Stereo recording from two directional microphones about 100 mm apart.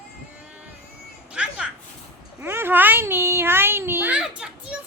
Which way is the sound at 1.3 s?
10° right (ahead or behind).